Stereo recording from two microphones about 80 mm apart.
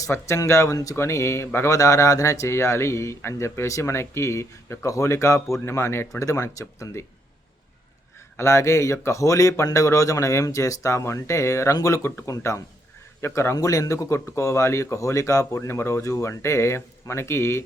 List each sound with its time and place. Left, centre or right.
0.1 s speech: left
8.4 s speech: left
13.6 s speech: left